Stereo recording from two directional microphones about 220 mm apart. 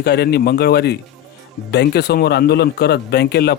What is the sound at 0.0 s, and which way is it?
Speech, 45° left (ahead or behind).